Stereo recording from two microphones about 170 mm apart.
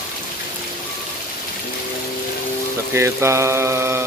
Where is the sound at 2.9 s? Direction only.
15° right (ahead or behind).